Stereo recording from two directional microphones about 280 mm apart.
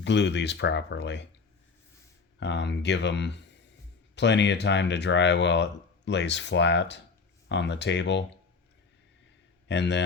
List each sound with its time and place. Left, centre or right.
0.0 s speech: left
2.4 s speech: left
9.6 s speech: left